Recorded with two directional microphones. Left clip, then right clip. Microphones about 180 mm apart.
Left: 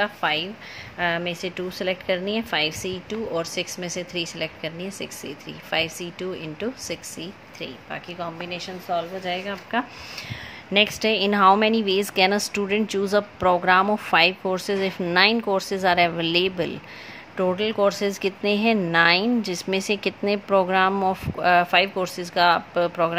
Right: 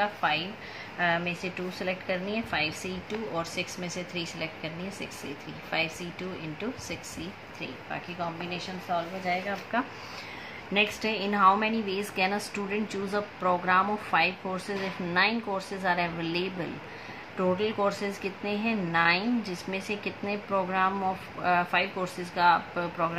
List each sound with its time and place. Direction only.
0.0 s a woman's voice: 50° left (ahead or behind)